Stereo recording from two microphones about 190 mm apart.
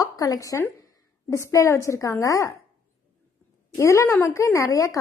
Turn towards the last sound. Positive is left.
turn(degrees=15)  # may be behind; listen again after turning